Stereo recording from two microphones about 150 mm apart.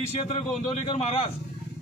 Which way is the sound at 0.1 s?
45° left (ahead or behind).